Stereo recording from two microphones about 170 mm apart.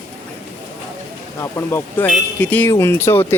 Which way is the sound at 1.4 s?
15° left (ahead or behind).